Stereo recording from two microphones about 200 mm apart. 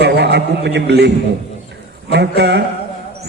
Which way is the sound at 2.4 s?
60° right (ahead or behind).